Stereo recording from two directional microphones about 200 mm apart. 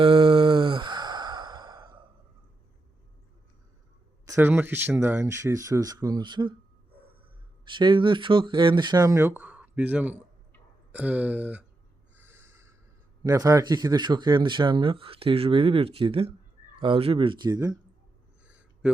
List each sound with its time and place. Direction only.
0.0 s sigh: 25° right (ahead or behind)
4.3 s speech: 10° right (ahead or behind)
7.7 s speech: 25° right (ahead or behind); by 11.6 s 5° right (ahead or behind)
12.1 s a sound: 10° right (ahead or behind)
13.2 s speech: 15° right (ahead or behind)